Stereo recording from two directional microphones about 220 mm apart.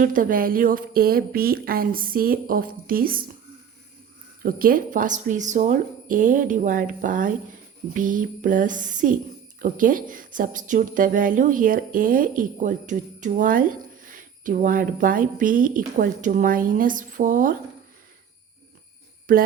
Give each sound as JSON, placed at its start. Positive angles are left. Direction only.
{"t": 0.0, "sound": "a woman's voice", "side_deg": -40}
{"t": 4.4, "sound": "a woman's voice", "side_deg": -40}